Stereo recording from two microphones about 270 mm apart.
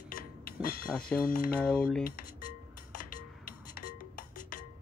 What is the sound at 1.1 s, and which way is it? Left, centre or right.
Speech, left.